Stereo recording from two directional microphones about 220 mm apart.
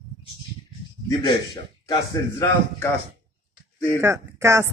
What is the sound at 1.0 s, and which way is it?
A man's voice, 15° left (ahead or behind).